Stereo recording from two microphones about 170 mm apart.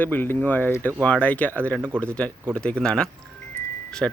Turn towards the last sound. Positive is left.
turn(degrees=0)  # may be behind; listen again after turning